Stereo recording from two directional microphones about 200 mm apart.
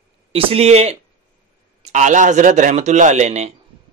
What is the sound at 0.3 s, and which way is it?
Speech, 30° right (ahead or behind).